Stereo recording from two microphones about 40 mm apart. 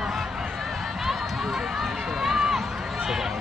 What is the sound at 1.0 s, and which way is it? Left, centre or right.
Run, centre.